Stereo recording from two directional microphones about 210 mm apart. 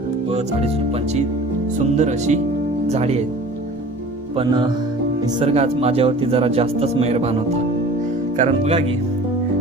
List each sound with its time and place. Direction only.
2.0 s speech: 35° right (ahead or behind)
4.4 s speech: 20° right (ahead or behind)
8.4 s speech: 30° right (ahead or behind)